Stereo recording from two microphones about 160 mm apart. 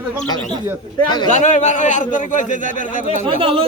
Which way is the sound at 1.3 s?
50° left (ahead or behind).